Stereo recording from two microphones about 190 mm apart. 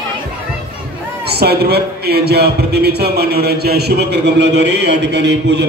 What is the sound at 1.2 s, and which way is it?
A man's voice, 55° right (ahead or behind).